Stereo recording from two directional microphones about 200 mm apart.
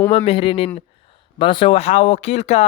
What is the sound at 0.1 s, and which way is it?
Speech, 30° left (ahead or behind).